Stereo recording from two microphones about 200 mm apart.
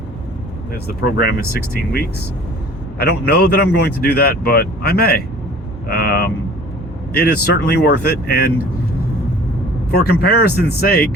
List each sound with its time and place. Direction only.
0.9 s speech: 50° left (ahead or behind)
3.0 s speech: 50° left (ahead or behind)
9.9 s speech: 50° left (ahead or behind)